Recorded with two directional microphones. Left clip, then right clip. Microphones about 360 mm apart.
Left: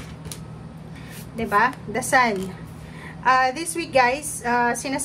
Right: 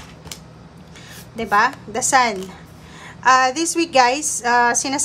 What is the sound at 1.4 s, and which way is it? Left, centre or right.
A woman's voice, centre.